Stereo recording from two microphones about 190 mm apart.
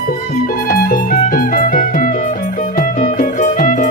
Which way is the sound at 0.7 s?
50° left (ahead or behind).